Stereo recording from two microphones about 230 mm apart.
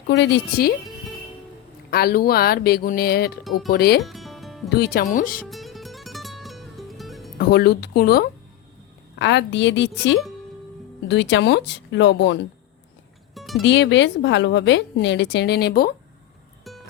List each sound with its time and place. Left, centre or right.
0.1 s a woman's voice: left
0.9 s music: centre
1.9 s a woman's voice: left
4.0 s music: centre
4.7 s speech: left
5.5 s music: centre
7.3 s a woman's voice: left
13.3 s music: centre
13.6 s a woman's voice: left